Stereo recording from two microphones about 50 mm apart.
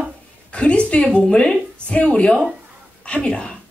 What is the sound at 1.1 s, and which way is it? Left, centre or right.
A woman's voice, left.